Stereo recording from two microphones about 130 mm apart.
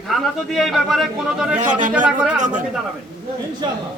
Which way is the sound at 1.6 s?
85° right.